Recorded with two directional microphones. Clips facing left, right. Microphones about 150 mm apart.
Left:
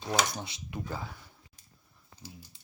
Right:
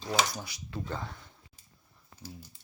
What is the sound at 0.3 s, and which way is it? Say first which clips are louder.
Speech: left 1 dB; 25° left (ahead or behind).